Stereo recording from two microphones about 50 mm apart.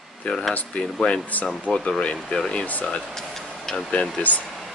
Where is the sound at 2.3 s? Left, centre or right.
Centre.